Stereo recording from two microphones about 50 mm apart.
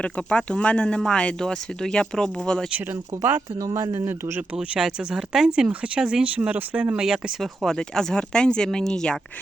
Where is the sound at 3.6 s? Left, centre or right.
Right.